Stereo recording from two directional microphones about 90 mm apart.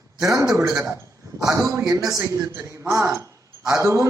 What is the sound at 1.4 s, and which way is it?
Speech, 40° right (ahead or behind).